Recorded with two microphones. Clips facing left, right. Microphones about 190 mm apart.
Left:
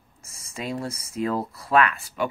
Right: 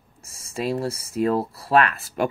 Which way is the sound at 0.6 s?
35° right (ahead or behind).